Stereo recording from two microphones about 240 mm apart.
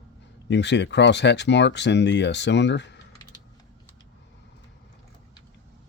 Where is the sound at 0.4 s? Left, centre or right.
Left.